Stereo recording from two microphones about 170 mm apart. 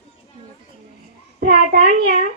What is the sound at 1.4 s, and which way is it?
Child singing, 65° right (ahead or behind).